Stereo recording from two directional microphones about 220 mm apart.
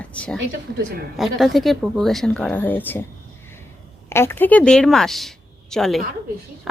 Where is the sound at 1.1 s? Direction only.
Centre (ahead or behind).